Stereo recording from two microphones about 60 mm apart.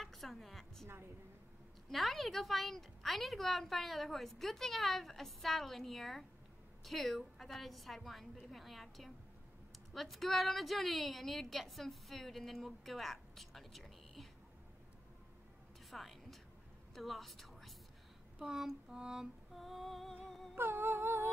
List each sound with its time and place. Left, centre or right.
0.0 s a sound: centre
1.9 s a woman's voice: centre
15.9 s music: centre
16.9 s a sound: centre
18.4 s music: centre
19.5 s a woman's voice: centre
20.2 s humming: centre
20.5 s humming: right